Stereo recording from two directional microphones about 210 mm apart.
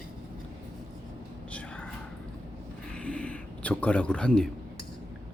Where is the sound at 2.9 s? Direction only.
5° left (ahead or behind).